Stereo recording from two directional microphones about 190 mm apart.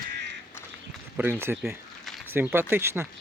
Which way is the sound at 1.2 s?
10° right (ahead or behind).